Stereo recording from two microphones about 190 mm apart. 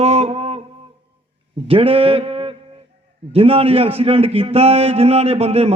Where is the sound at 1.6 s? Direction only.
30° right (ahead or behind).